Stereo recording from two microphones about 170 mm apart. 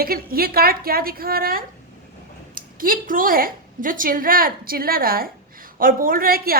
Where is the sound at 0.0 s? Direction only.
60° right (ahead or behind).